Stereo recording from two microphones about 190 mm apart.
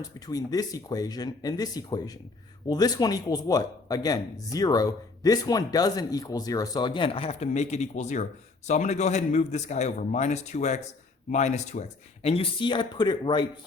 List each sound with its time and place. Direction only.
0.3 s speech: 20° left (ahead or behind)